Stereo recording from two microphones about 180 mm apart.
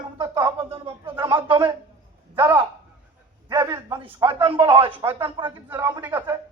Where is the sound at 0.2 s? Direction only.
15° right (ahead or behind).